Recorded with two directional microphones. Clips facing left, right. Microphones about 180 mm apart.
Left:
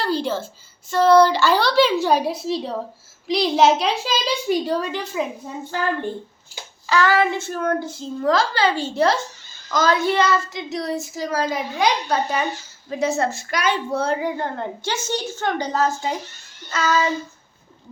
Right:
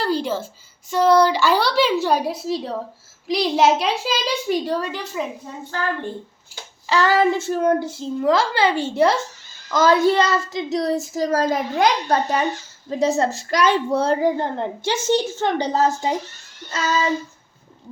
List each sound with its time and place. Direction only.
0.0 s a woman's voice: 10° right (ahead or behind)
6.8 s a woman's voice: 30° right (ahead or behind); by 12.4 s 50° right (ahead or behind)
12.9 s a woman's voice: 35° right (ahead or behind)